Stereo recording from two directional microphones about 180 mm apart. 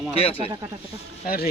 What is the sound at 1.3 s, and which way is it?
Speech, 60° left (ahead or behind).